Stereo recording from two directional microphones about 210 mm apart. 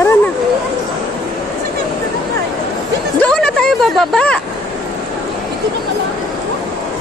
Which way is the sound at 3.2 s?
5° left (ahead or behind).